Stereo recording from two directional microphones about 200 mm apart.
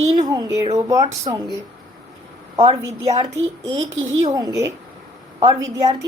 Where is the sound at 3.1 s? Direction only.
35° right (ahead or behind).